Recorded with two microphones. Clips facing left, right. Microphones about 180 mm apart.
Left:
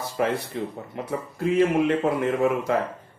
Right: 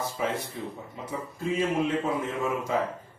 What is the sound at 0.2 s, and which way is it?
Speech, 65° left (ahead or behind).